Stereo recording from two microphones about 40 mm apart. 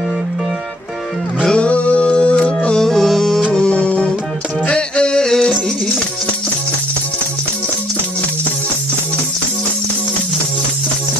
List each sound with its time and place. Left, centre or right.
1.4 s music: left
2.7 s music: centre
3.5 s music: left